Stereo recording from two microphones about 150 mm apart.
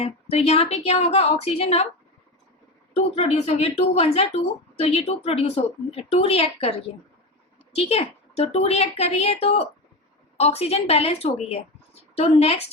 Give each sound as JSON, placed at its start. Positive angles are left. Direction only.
{"t": 0.0, "sound": "speech", "side_deg": 45}
{"t": 2.9, "sound": "speech", "side_deg": 40}